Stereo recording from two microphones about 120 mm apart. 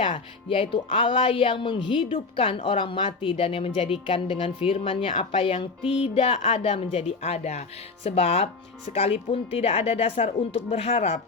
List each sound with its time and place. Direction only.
0.4 s speech: 50° left (ahead or behind)